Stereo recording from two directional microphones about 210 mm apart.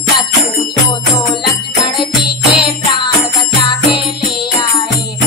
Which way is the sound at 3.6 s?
20° left (ahead or behind).